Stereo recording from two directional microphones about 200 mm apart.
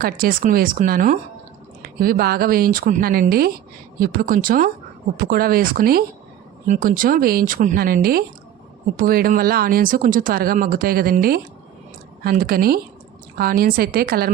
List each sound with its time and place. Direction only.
0.0 s speech: 45° right (ahead or behind)